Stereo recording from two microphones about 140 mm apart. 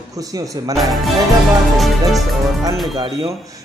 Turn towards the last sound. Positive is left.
turn(degrees=-25)  # may be behind; listen again after turning